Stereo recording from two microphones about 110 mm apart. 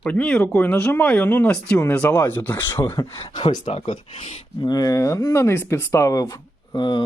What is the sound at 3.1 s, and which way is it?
Speech, 50° left (ahead or behind).